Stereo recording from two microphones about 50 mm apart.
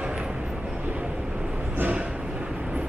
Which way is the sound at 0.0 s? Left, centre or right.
Centre.